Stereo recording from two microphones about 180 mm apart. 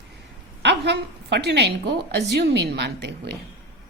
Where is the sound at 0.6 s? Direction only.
70° right (ahead or behind).